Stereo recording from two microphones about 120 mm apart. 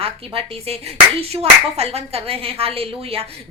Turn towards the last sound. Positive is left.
turn(degrees=-55)  # may be behind; listen again after turning